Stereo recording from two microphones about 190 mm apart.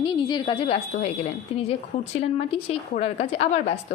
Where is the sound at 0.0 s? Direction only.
25° left (ahead or behind).